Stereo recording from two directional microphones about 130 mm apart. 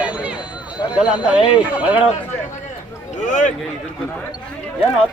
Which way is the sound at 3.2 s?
75° left (ahead or behind).